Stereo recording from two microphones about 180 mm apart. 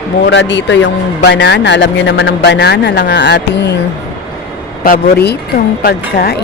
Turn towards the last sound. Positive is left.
turn(degrees=60)  # may be behind; listen again after turning